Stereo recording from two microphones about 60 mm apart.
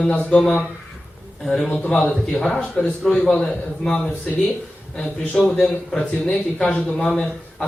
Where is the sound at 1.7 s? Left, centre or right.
Left.